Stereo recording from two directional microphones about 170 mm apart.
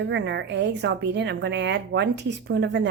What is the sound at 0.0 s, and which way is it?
A woman's voice, 90° right.